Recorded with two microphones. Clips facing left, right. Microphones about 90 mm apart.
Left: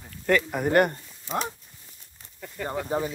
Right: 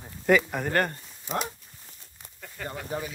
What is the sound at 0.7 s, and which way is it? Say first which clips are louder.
Speech: left 6 dB; 20° left (ahead or behind).